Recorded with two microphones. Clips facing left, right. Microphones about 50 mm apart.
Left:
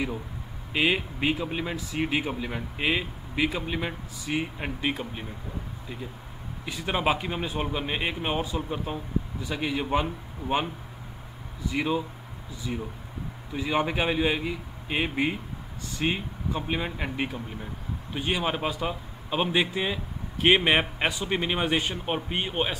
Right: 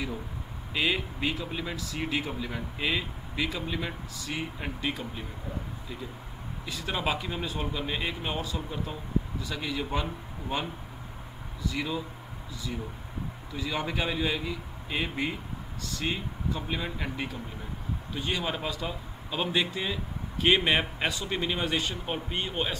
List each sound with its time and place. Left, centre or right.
0.7 s speech: left
6.6 s speech: left